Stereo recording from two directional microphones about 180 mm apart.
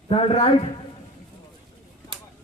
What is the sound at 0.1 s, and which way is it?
Speech, 30° left (ahead or behind).